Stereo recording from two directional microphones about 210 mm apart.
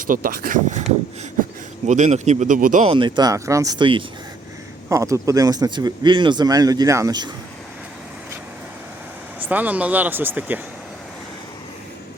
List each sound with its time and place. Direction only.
0.1 s speech: 45° right (ahead or behind)
1.9 s speech: 35° right (ahead or behind)
2.8 s speech: 25° right (ahead or behind)
9.4 s speech: 5° right (ahead or behind)